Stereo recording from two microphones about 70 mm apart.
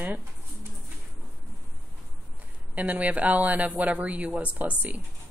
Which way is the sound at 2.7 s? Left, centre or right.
Centre.